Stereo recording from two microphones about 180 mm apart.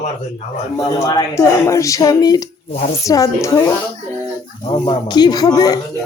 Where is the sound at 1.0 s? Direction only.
20° left (ahead or behind).